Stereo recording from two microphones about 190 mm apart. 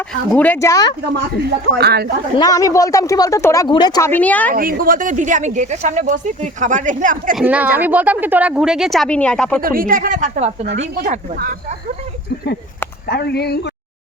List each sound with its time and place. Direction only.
0.1 s speech: 10° left (ahead or behind)
1.8 s speech: 55° right (ahead or behind)
2.4 s speech: 20° left (ahead or behind)
4.5 s speech: 50° right (ahead or behind)
7.3 s speech: 10° right (ahead or behind)
9.6 s speech: 50° right (ahead or behind)
13.1 s speech: 60° left (ahead or behind)